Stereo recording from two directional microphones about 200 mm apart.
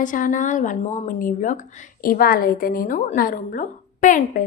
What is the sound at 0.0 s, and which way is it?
Speech, 40° left (ahead or behind).